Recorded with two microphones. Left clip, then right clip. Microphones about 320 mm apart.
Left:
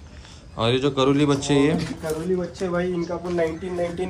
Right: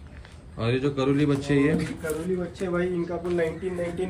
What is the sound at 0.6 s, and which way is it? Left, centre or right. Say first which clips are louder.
A man's voice: left 5 dB; centre.